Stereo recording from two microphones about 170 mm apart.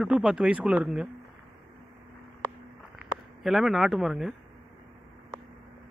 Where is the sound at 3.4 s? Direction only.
Centre (ahead or behind).